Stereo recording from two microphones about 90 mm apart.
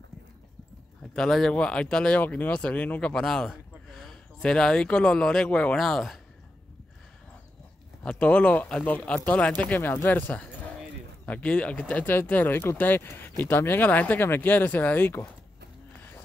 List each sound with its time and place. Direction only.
1.1 s speech: 5° left (ahead or behind)
8.0 s speech: 10° left (ahead or behind)